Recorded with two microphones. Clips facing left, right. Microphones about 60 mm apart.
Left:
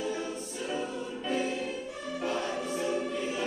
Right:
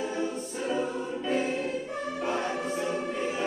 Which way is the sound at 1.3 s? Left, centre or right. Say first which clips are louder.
Right 3 dB; right.